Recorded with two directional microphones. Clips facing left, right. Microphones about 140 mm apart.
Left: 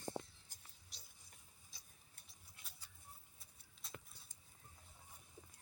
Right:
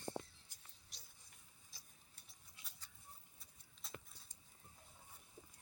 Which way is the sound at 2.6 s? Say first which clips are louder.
Right 1 dB; 10° left (ahead or behind).